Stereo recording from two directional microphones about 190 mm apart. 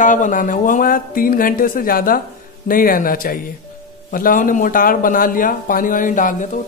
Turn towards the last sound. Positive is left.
turn(degrees=45)  # may be behind; listen again after turning